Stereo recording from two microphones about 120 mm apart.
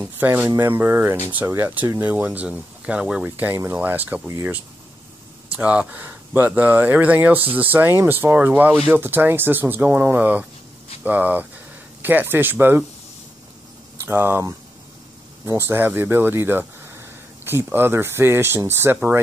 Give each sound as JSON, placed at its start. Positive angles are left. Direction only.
{"t": 0.0, "sound": "speech", "side_deg": -15}
{"t": 5.6, "sound": "speech", "side_deg": -10}
{"t": 14.0, "sound": "speech", "side_deg": -15}
{"t": 15.4, "sound": "speech", "side_deg": -20}